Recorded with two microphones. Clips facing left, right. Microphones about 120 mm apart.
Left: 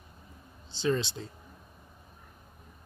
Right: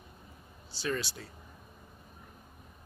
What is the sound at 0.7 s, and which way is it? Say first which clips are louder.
Speech: left 6 dB; 25° left (ahead or behind).